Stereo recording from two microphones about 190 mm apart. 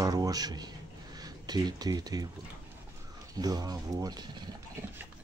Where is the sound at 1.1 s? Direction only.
20° right (ahead or behind).